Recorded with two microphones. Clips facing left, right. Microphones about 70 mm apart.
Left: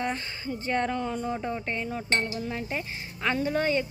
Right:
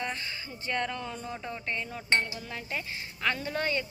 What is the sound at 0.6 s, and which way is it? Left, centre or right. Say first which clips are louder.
Chink: left 5 dB; left.